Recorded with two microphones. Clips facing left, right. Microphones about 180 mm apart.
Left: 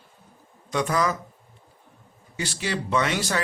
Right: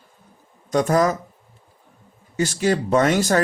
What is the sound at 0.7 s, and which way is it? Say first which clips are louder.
Speech: right 6 dB; 45° right (ahead or behind).